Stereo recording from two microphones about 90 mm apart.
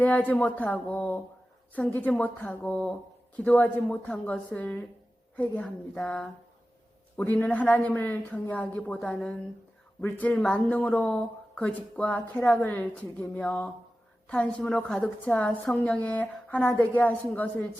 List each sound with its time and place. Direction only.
0.0 s speech: 15° left (ahead or behind)
10.0 s speech: 15° left (ahead or behind)